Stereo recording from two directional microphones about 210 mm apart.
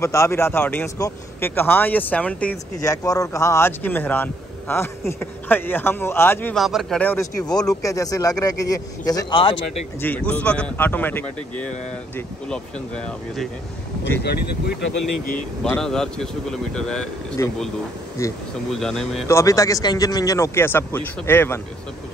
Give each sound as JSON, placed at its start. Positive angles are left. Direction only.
{"t": 0.0, "sound": "speech", "side_deg": 15}
{"t": 10.0, "sound": "speech", "side_deg": 5}
{"t": 12.9, "sound": "speech", "side_deg": 5}
{"t": 14.2, "sound": "speech", "side_deg": 50}
{"t": 15.3, "sound": "speech", "side_deg": 5}
{"t": 17.4, "sound": "speech", "side_deg": 15}
{"t": 18.7, "sound": "speech", "side_deg": 0}
{"t": 19.2, "sound": "speech", "side_deg": 15}